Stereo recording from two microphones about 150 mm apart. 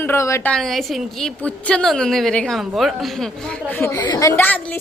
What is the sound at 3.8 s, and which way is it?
Speech, 25° left (ahead or behind).